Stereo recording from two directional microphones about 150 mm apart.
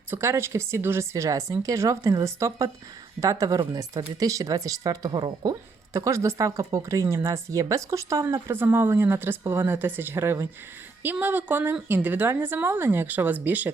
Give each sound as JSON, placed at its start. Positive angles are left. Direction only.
{"t": 0.1, "sound": "a woman's voice", "side_deg": -15}